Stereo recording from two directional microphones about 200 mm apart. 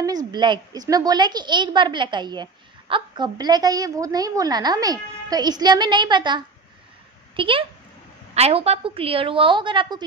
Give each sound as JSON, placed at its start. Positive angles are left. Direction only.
{"t": 0.3, "sound": "a woman's voice", "side_deg": -20}